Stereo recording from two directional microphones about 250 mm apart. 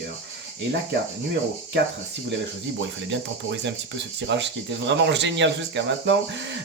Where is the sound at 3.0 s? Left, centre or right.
Right.